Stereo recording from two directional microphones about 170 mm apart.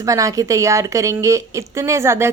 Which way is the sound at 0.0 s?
20° right (ahead or behind).